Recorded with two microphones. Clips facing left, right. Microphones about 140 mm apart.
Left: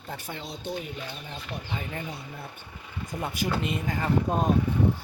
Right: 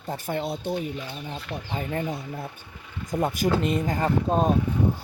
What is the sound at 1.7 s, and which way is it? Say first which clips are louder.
Speech: right 7 dB; 40° right (ahead or behind).